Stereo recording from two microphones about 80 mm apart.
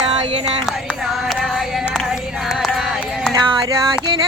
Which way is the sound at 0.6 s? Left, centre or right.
Centre.